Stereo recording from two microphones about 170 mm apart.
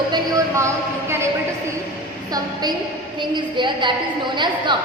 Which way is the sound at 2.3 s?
25° right (ahead or behind).